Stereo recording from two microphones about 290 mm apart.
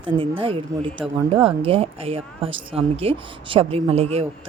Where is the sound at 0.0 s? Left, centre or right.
Centre.